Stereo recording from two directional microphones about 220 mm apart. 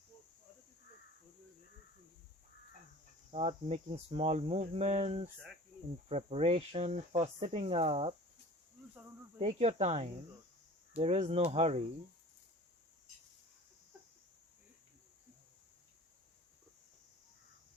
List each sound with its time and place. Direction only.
3.3 s speech: 25° right (ahead or behind)
9.4 s speech: 30° right (ahead or behind)